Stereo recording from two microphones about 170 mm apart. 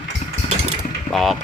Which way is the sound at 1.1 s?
Centre (ahead or behind).